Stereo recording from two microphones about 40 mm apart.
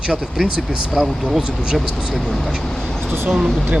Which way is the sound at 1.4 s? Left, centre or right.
Centre.